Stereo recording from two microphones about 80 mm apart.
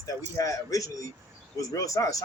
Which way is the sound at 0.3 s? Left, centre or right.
Left.